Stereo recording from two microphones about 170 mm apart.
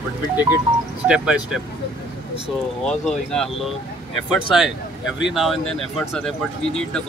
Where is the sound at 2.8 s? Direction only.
5° left (ahead or behind).